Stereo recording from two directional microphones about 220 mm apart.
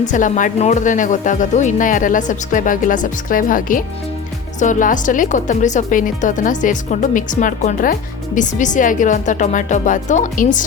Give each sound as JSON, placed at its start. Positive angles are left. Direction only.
{"t": 0.0, "sound": "speech", "side_deg": 35}